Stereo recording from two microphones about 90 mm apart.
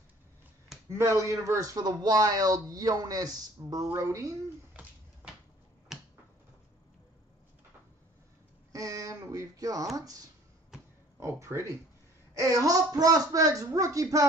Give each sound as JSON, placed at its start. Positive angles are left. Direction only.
{"t": 0.8, "sound": "speech", "side_deg": -30}
{"t": 5.9, "sound": "finger snapping", "side_deg": -5}
{"t": 8.7, "sound": "speech", "side_deg": -40}
{"t": 11.1, "sound": "speech", "side_deg": -35}